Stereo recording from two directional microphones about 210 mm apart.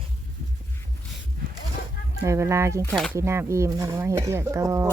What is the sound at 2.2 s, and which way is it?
Speech, 15° right (ahead or behind).